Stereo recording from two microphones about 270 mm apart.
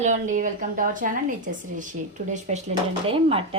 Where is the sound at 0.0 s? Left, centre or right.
Right.